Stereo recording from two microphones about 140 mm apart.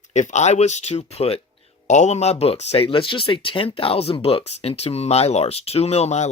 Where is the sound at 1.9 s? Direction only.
55° left (ahead or behind).